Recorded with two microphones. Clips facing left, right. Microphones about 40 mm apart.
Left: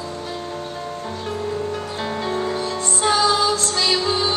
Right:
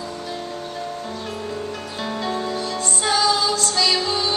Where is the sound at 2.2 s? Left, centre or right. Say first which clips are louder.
Left 2 dB; centre.